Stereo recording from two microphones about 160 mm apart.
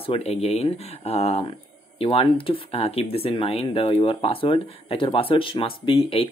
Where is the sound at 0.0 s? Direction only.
40° left (ahead or behind).